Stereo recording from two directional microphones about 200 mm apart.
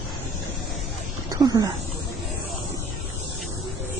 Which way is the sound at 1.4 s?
20° right (ahead or behind).